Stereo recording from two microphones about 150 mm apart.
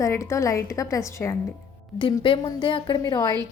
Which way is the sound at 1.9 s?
35° left (ahead or behind).